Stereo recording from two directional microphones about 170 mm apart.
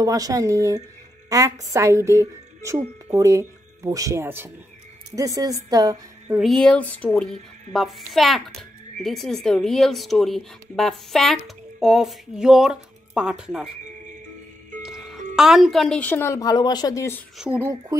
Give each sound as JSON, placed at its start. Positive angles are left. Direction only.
{"t": 0.0, "sound": "a woman's voice", "side_deg": -20}
{"t": 6.3, "sound": "speech", "side_deg": 0}
{"t": 14.8, "sound": "music", "side_deg": -5}
{"t": 15.3, "sound": "speech", "side_deg": 0}
{"t": 17.4, "sound": "speech", "side_deg": -5}